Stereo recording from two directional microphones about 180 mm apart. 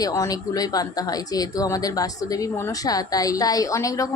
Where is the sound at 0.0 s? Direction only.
20° left (ahead or behind).